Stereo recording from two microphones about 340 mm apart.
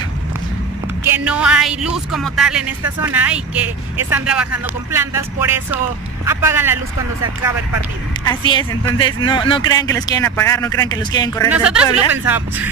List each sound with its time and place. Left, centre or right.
1.1 s a man's voice: centre
8.3 s speech: centre
11.5 s speech: centre